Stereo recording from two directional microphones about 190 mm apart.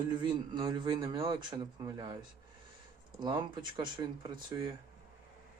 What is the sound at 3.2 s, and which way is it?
Speech, 25° right (ahead or behind).